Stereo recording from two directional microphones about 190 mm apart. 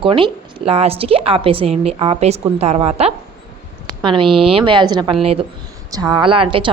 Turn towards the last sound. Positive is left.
turn(degrees=-25)  # may be behind; listen again after turning